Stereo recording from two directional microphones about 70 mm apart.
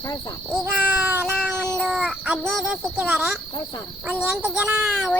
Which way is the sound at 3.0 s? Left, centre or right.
Right.